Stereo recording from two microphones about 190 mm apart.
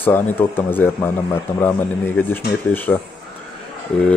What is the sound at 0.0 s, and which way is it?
Speech, 10° left (ahead or behind).